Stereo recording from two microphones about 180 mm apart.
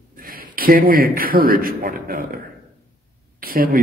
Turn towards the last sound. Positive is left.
turn(degrees=-55)  # may be behind; listen again after turning